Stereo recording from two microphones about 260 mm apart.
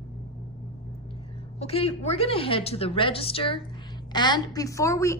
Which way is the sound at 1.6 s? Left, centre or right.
Left.